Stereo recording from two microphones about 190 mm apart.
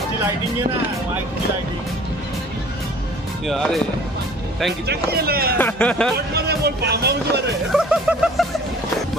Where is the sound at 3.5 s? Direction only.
Centre (ahead or behind).